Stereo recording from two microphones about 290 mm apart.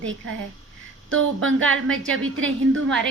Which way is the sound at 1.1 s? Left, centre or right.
Right.